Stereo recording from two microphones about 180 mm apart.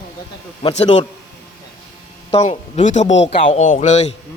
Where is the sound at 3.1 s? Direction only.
90° left.